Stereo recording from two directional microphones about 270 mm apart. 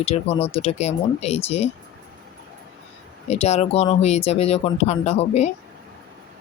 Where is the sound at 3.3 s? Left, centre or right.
Left.